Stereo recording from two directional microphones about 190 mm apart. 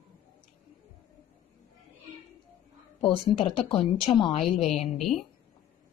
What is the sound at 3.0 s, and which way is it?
A woman's voice, 30° left (ahead or behind).